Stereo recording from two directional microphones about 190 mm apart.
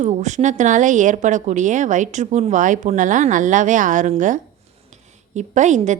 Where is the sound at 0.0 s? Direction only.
40° right (ahead or behind).